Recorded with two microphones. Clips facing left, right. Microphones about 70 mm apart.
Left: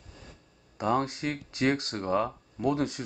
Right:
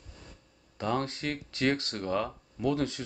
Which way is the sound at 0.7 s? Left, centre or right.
Left.